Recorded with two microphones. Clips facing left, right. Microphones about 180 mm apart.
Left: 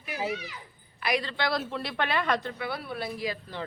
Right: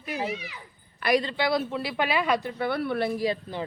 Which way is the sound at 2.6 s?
60° right (ahead or behind).